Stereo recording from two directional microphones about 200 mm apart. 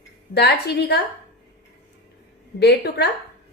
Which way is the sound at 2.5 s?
55° left (ahead or behind).